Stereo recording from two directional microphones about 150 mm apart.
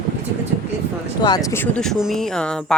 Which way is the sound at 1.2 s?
25° left (ahead or behind).